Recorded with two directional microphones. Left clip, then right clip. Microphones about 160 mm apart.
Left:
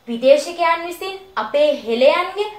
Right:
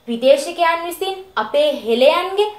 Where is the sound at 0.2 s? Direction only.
35° right (ahead or behind).